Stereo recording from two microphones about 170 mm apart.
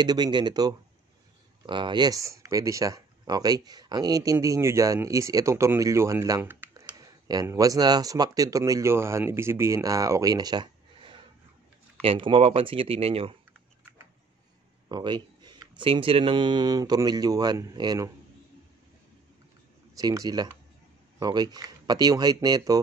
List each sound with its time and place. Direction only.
0.0 s speech: 25° right (ahead or behind)
6.7 s speech: 20° right (ahead or behind)
14.9 s a sound: 25° right (ahead or behind)
15.8 s speech: 30° right (ahead or behind)
20.0 s speech: 20° right (ahead or behind)